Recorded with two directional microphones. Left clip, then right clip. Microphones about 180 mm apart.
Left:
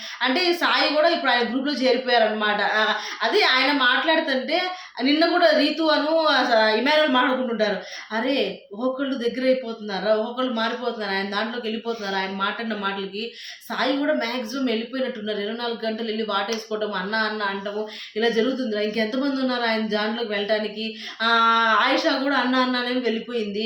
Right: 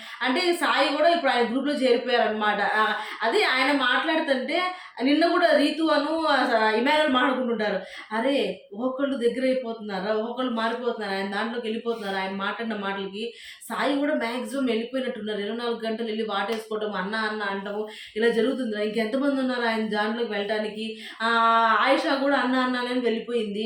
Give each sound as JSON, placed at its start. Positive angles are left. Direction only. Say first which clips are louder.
{"t": 0.2, "sound": "a woman's voice", "louder": "left 3 dB", "side_deg": 20}
{"t": 9.9, "sound": "a woman's voice", "louder": "left 5 dB", "side_deg": 20}
{"t": 15.8, "sound": "a woman's voice", "louder": "left 2 dB", "side_deg": 20}